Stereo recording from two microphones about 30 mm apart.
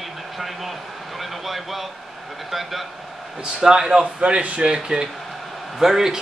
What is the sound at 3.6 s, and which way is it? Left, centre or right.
Speech, right.